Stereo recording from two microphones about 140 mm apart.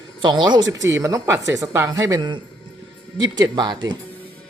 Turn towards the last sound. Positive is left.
turn(degrees=-30)  # may be behind; listen again after turning